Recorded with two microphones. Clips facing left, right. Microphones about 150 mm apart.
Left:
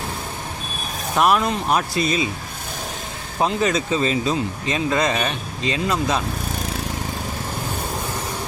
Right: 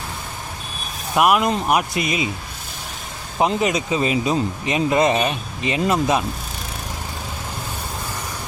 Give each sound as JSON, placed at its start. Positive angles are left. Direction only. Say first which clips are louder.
{"t": 1.1, "sound": "speech", "louder": "right 1 dB", "side_deg": -10}
{"t": 3.6, "sound": "speech", "louder": "even", "side_deg": -15}